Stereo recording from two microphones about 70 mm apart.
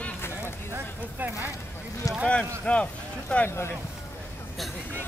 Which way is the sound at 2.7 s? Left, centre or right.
Centre.